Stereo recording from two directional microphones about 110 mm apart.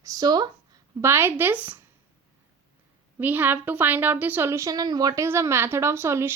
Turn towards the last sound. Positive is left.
turn(degrees=-25)  # may be behind; listen again after turning